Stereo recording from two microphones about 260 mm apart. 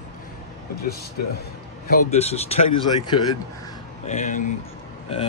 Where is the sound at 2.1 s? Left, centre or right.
Left.